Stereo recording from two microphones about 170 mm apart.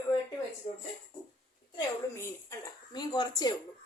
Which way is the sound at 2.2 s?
20° left (ahead or behind).